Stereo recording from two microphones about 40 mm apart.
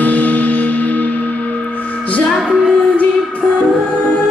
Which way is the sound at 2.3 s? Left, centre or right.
Centre.